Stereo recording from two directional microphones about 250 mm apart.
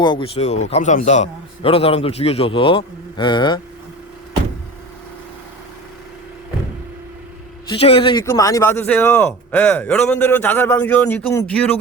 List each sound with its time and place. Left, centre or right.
0.0 s a man's voice: centre
7.7 s a man's voice: left; by 11.7 s centre